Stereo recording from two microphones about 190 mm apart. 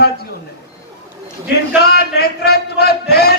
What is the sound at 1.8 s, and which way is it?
Music, 55° left (ahead or behind).